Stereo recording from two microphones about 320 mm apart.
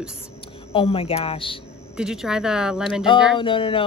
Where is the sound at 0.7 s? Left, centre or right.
Centre.